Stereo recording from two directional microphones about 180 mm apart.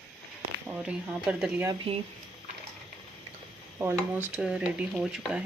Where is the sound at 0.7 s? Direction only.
5° right (ahead or behind).